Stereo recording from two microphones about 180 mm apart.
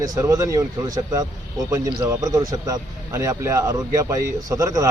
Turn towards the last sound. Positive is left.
turn(degrees=-20)  # may be behind; listen again after turning